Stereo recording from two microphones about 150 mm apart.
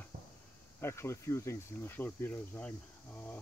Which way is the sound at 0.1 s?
50° right (ahead or behind).